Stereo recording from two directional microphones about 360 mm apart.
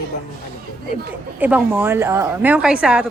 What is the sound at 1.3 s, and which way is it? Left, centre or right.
A woman's voice, centre.